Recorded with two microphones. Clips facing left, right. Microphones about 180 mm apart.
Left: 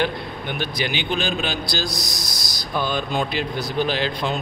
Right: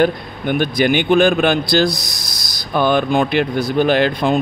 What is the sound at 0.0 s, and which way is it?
Speech, 50° right (ahead or behind).